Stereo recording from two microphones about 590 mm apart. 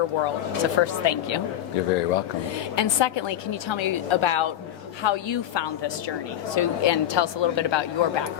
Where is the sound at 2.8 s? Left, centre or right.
Left.